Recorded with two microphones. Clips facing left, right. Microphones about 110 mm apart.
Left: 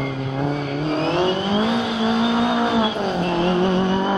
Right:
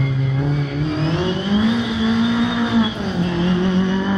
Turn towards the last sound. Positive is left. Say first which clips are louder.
# even
turn(degrees=45)  # may be behind; listen again after turning